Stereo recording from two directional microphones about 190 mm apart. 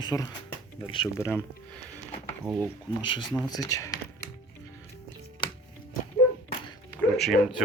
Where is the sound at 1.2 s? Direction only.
10° left (ahead or behind).